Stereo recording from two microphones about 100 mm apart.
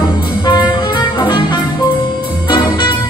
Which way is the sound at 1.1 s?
50° left (ahead or behind).